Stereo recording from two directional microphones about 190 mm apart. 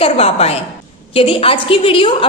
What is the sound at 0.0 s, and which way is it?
A woman's voice, 30° left (ahead or behind).